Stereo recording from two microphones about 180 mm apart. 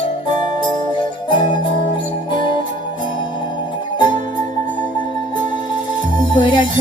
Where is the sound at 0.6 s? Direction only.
25° left (ahead or behind).